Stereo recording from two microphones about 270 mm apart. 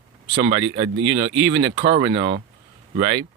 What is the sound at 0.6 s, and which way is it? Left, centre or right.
Speech, centre.